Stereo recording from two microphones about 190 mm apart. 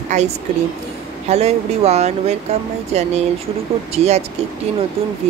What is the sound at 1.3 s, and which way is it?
Speech, 35° right (ahead or behind).